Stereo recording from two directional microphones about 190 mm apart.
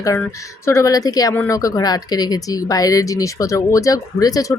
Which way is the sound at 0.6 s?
15° left (ahead or behind).